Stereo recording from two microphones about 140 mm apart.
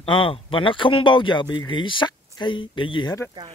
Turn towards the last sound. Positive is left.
turn(degrees=35)  # may be behind; listen again after turning